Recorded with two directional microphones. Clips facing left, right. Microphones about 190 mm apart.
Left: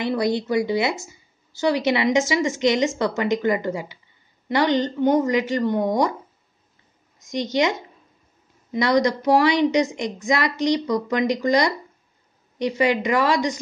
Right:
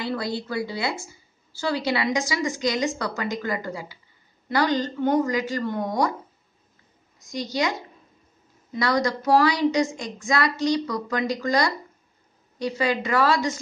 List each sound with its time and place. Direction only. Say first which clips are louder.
0.0 s a woman's voice: left 6 dB; 20° left (ahead or behind)
7.2 s a woman's voice: left 5 dB; 20° left (ahead or behind)
8.7 s a woman's voice: left 4 dB; 20° left (ahead or behind)